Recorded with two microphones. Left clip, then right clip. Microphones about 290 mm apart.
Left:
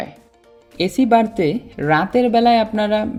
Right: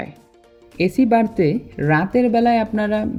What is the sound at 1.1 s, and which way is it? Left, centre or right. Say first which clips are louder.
Speech: left 5 dB; centre.